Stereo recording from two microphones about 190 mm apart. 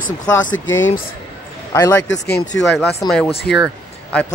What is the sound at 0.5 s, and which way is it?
Speech, 90° left.